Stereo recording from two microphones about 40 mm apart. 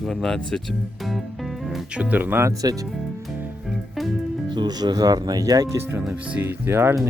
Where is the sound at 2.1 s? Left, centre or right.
Right.